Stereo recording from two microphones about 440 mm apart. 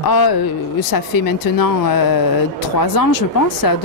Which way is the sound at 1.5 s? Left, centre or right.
Left.